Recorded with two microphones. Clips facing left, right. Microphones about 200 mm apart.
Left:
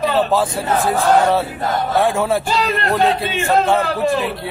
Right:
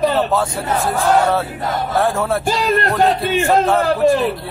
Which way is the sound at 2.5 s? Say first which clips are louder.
Right 2 dB; 45° right (ahead or behind).